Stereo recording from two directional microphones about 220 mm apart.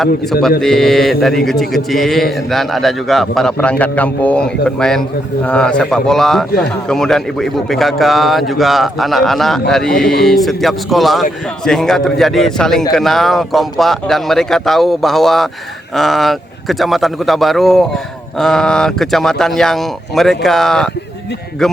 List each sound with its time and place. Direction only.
0.6 s a man's voice: centre (ahead or behind)